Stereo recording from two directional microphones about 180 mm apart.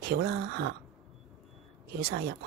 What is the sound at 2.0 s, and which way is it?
Speech, 60° right (ahead or behind).